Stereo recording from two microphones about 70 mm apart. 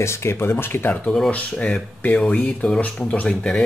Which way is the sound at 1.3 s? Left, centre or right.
Centre.